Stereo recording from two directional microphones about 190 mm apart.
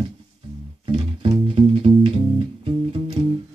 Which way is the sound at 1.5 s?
30° right (ahead or behind).